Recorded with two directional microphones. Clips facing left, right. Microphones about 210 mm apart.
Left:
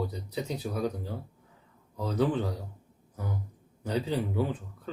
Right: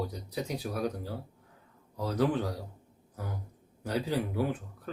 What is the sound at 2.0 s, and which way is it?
Speech, 10° right (ahead or behind).